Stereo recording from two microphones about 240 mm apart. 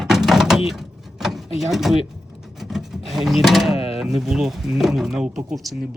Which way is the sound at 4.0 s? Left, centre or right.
Centre.